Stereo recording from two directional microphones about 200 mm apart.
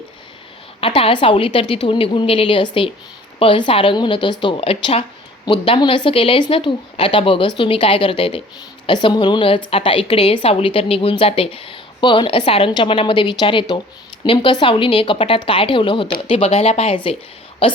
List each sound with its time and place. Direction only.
0.8 s a woman's voice: 25° left (ahead or behind)